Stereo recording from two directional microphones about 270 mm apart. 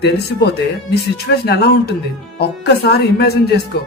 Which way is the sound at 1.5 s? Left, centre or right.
Left.